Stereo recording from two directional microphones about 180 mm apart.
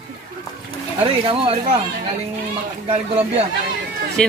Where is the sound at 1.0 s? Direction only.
30° right (ahead or behind).